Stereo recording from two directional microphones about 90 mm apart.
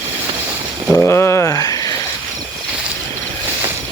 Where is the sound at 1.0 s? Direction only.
30° left (ahead or behind).